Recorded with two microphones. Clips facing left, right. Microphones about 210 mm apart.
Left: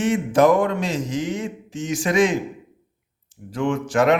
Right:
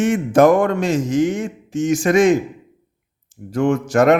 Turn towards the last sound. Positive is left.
turn(degrees=-45)  # may be behind; listen again after turning